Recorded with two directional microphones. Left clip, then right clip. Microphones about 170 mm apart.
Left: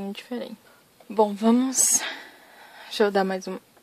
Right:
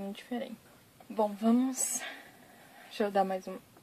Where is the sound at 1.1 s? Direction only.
55° left (ahead or behind).